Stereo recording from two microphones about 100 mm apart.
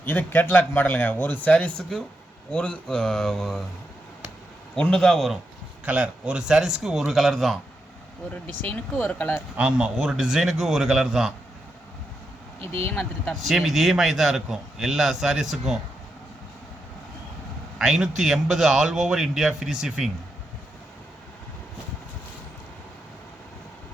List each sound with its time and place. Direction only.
0.0 s speech: 20° left (ahead or behind); by 3.6 s 5° left (ahead or behind)
4.7 s a man's voice: 5° left (ahead or behind)
5.8 s a man's voice: 15° right (ahead or behind)
8.3 s speech: 15° left (ahead or behind)
9.6 s a man's voice: 10° right (ahead or behind)
12.7 s speech: 20° left (ahead or behind)
13.5 s a man's voice: 5° right (ahead or behind)
17.7 s a man's voice: 5° right (ahead or behind)